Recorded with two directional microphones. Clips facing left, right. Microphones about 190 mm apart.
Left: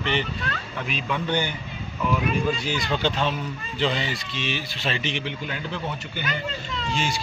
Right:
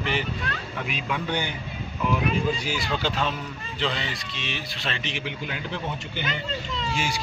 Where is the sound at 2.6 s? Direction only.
5° right (ahead or behind).